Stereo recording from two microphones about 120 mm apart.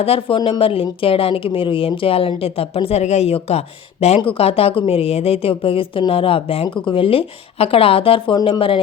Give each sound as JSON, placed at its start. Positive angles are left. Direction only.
{"t": 0.0, "sound": "speech", "side_deg": 50}